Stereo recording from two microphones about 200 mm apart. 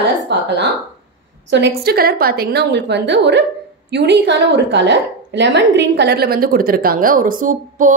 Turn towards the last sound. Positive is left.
turn(degrees=-40)  # may be behind; listen again after turning